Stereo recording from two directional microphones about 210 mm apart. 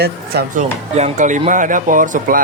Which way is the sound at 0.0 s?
50° right (ahead or behind).